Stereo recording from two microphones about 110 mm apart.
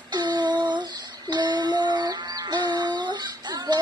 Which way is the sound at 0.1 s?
40° right (ahead or behind).